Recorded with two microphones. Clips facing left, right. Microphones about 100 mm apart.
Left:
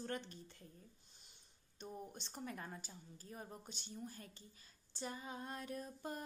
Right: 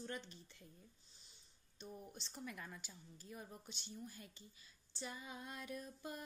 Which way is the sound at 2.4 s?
35° left (ahead or behind).